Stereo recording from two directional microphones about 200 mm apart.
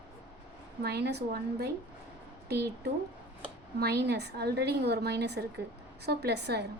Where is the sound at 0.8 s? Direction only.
55° right (ahead or behind).